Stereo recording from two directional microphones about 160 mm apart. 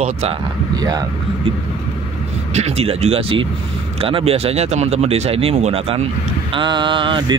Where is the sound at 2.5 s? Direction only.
40° right (ahead or behind).